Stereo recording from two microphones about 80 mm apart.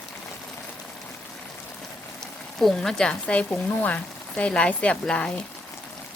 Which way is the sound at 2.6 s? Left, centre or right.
Centre.